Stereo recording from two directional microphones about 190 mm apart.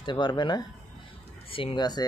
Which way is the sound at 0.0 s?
25° left (ahead or behind).